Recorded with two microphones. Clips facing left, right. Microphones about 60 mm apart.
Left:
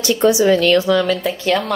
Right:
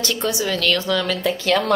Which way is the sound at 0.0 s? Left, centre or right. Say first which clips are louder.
Left 9 dB; centre.